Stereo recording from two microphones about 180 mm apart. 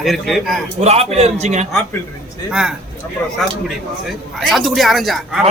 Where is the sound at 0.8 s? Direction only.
35° right (ahead or behind).